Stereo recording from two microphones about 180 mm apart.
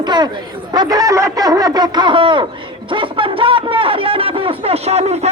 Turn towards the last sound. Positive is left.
turn(degrees=-35)  # may be behind; listen again after turning